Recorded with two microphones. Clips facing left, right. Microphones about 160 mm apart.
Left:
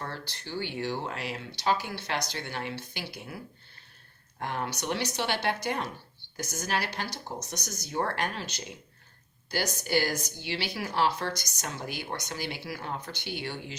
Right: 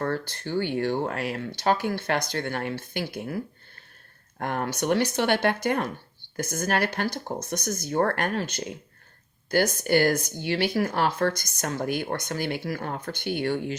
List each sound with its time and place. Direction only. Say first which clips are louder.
0.0 s speech: right 10 dB; 50° right (ahead or behind)